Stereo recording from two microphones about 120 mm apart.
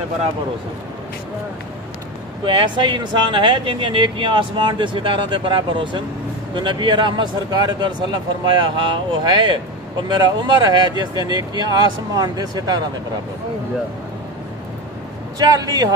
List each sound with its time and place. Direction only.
2.4 s speech: 45° right (ahead or behind)
15.3 s speech: 35° right (ahead or behind)